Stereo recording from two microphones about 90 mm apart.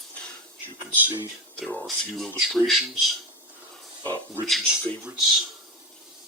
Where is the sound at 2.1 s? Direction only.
Centre (ahead or behind).